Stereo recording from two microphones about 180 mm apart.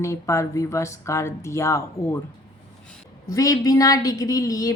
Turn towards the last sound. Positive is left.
turn(degrees=20)  # may be behind; listen again after turning